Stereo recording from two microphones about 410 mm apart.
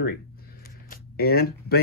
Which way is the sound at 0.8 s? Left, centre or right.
Left.